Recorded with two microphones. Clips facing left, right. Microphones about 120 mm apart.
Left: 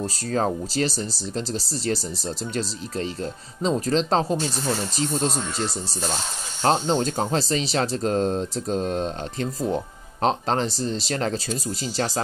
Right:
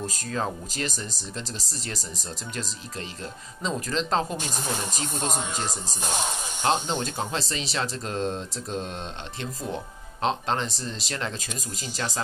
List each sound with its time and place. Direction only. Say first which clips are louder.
0.0 s speech: left 5 dB; 40° left (ahead or behind)
6.6 s speech: left 5 dB; 40° left (ahead or behind)